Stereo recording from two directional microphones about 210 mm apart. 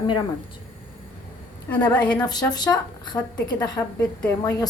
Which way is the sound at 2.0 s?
20° left (ahead or behind).